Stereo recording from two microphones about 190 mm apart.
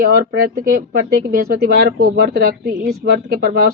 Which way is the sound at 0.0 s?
55° right (ahead or behind).